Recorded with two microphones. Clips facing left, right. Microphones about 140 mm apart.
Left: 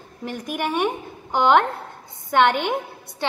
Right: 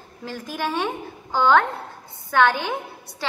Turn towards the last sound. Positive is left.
turn(degrees=20)  # may be behind; listen again after turning